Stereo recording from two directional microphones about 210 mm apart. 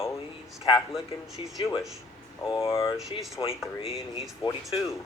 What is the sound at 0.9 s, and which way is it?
Speech, centre (ahead or behind).